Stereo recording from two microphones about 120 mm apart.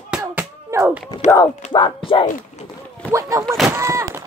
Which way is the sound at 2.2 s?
75° left (ahead or behind).